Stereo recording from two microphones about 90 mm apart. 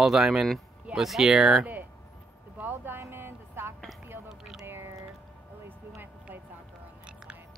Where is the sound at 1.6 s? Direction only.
20° right (ahead or behind).